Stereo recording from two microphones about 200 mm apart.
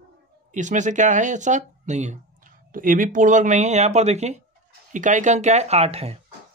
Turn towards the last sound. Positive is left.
turn(degrees=-30)  # may be behind; listen again after turning